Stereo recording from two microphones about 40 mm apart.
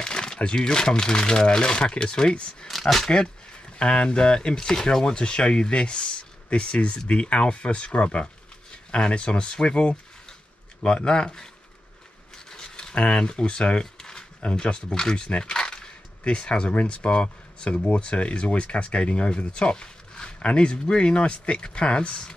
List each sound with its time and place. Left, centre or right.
0.0 s speech: left
2.7 s speech: centre
3.7 s speech: left
5.0 s speech: left
12.4 s a sound: left
14.5 s speech: left